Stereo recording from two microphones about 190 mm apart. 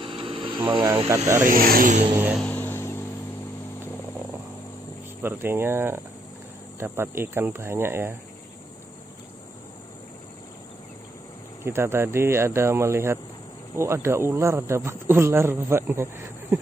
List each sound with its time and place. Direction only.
0.0 s a sound: 30° right (ahead or behind)
1.0 s a man's voice: 15° right (ahead or behind)
1.4 s speech: 50° right (ahead or behind)
2.4 s a sound: 10° left (ahead or behind)
5.2 s a man's voice: 10° right (ahead or behind)
11.6 s a man's voice: 15° right (ahead or behind)